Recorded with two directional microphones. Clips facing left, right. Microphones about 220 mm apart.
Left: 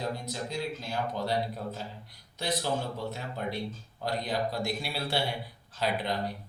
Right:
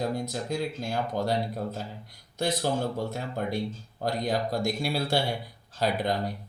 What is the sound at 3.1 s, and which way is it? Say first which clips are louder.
Speech: right 4 dB; 45° right (ahead or behind).